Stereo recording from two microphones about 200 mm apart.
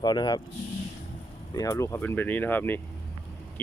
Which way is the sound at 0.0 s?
20° left (ahead or behind).